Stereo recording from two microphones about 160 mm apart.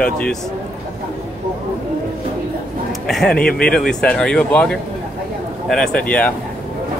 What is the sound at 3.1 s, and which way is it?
Speech, 5° left (ahead or behind).